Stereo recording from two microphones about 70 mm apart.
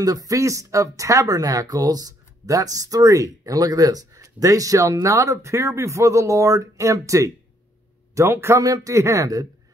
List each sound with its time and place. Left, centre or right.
0.0 s speech: right
8.5 s speech: right